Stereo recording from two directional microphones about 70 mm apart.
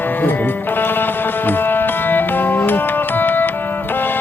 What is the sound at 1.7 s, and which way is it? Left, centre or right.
Music, left.